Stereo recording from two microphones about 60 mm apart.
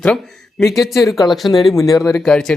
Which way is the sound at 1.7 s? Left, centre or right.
Left.